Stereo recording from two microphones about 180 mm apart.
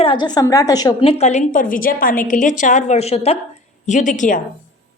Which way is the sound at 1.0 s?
40° left (ahead or behind).